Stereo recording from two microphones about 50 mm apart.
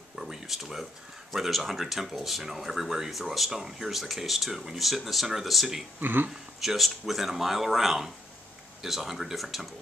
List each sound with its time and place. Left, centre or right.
0.2 s speech: centre
5.9 s speech: right
6.6 s speech: centre